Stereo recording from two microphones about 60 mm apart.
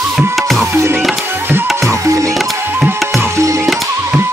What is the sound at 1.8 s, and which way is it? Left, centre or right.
Music, right.